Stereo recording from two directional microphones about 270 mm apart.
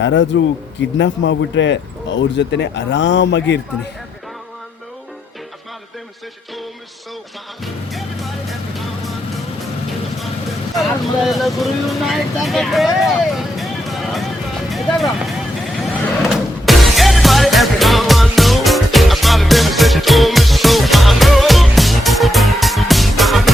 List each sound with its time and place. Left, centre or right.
0.0 s speech: left
7.6 s music: centre
10.8 s speech: centre
14.7 s music: centre